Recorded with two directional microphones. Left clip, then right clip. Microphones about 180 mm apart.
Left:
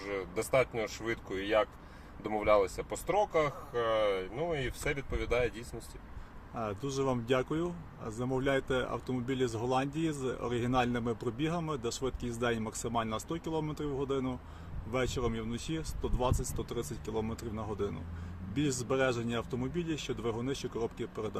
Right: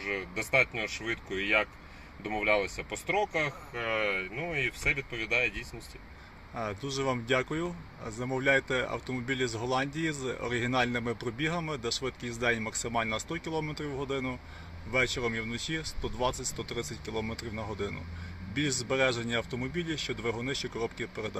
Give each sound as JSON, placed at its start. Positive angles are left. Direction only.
{"t": 0.0, "sound": "speech", "side_deg": 20}
{"t": 2.3, "sound": "speech", "side_deg": 20}
{"t": 6.6, "sound": "speech", "side_deg": 5}